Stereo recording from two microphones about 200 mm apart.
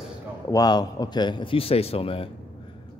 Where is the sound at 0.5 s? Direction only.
20° left (ahead or behind).